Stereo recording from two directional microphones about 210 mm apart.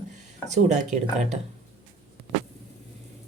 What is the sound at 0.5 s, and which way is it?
Speech, 35° right (ahead or behind).